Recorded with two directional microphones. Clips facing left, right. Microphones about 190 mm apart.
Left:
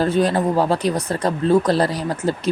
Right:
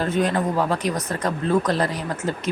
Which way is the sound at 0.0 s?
35° left (ahead or behind).